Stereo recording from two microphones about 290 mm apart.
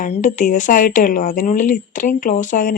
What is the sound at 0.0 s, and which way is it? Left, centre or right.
Speech, left.